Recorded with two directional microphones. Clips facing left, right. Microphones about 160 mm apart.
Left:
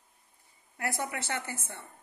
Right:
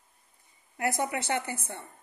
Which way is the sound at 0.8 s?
20° right (ahead or behind).